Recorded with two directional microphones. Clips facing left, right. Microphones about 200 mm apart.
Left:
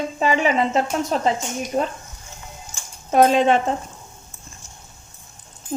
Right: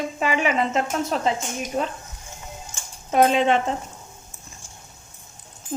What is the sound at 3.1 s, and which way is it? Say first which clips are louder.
Speech: left 3 dB; 40° left (ahead or behind).